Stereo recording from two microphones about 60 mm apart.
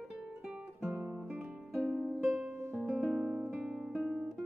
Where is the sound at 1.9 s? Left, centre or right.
Right.